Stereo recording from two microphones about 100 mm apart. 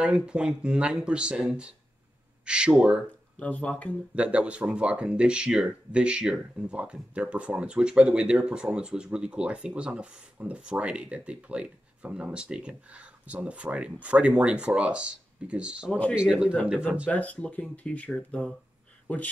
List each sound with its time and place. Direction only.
0.0 s speech: 10° right (ahead or behind)
3.3 s speech: 15° left (ahead or behind)
4.1 s speech: 10° right (ahead or behind)
15.9 s speech: 10° left (ahead or behind)
16.2 s speech: 10° right (ahead or behind)
17.1 s speech: 15° left (ahead or behind)